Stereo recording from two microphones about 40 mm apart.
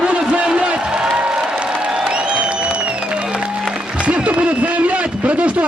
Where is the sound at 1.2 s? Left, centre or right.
Right.